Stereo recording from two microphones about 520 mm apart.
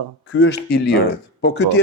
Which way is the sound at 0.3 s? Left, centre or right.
Left.